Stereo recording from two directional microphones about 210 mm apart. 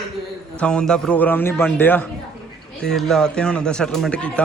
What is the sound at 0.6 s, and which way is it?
A man's voice, 5° left (ahead or behind).